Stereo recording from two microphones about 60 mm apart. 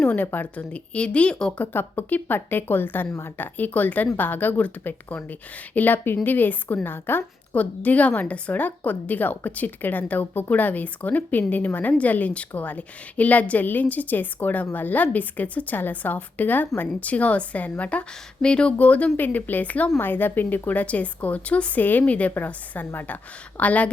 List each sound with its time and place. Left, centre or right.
0.5 s speech: centre
1.5 s a woman's voice: left